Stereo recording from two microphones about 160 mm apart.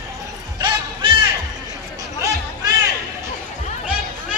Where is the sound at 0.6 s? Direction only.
30° right (ahead or behind).